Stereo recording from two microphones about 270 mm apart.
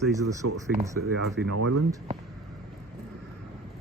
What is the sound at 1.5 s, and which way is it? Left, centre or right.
Speech, right.